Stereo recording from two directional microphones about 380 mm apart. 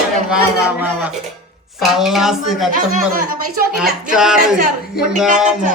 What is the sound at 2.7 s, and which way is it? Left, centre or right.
Speech, right.